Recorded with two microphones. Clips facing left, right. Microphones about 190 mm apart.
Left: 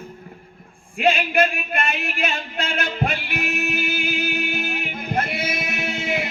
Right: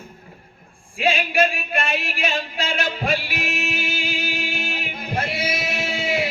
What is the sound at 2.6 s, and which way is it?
Music, 55° left (ahead or behind).